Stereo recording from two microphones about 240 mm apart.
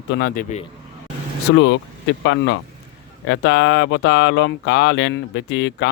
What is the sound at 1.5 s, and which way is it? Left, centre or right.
Speech, left.